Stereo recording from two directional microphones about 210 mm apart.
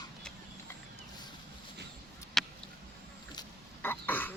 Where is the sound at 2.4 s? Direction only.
Centre (ahead or behind).